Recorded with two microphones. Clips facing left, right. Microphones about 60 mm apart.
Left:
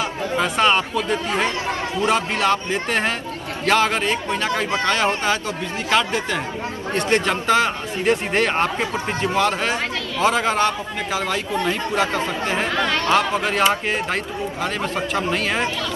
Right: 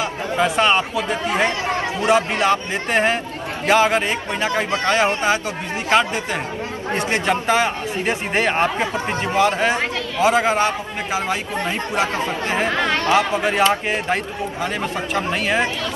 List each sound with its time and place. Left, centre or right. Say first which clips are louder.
0.0 s speech: right 2 dB; centre
1.2 s speech: right 2 dB; right
10.2 s speech: right 2 dB; centre
13.1 s speech: right 1 dB; centre